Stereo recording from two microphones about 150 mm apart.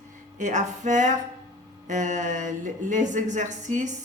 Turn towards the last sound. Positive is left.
turn(degrees=-55)  # may be behind; listen again after turning